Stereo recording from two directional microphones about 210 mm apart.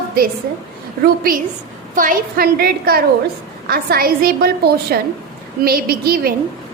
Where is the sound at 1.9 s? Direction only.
40° right (ahead or behind).